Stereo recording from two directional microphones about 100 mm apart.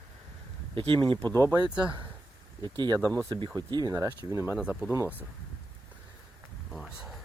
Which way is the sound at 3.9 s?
30° right (ahead or behind).